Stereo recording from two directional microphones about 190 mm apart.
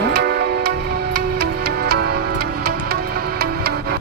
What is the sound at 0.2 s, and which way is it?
Music, 55° right (ahead or behind).